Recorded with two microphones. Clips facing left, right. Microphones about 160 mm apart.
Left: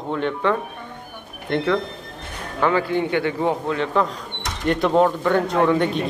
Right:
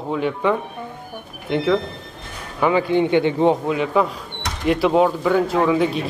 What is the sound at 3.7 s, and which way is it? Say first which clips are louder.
Speech: right 2 dB; 10° right (ahead or behind).